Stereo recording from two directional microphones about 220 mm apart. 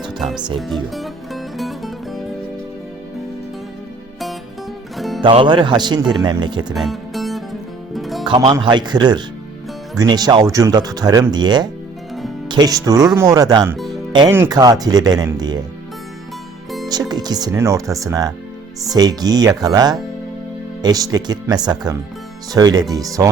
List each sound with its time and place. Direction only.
0.2 s music: centre (ahead or behind)
4.9 s music: centre (ahead or behind)
5.2 s speech: 25° right (ahead or behind)
6.7 s music: centre (ahead or behind)
8.2 s speech: 20° right (ahead or behind)
16.9 s speech: 15° right (ahead or behind)